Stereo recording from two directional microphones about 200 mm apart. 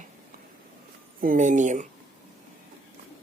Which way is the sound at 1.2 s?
40° right (ahead or behind).